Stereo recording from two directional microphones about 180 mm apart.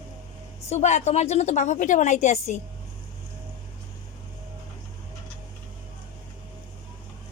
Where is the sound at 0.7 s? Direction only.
40° left (ahead or behind).